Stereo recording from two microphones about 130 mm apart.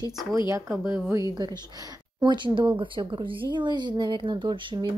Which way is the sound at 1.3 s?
30° right (ahead or behind).